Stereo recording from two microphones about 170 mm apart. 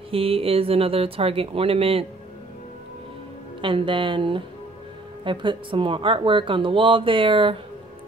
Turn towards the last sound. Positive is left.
turn(degrees=-30)  # may be behind; listen again after turning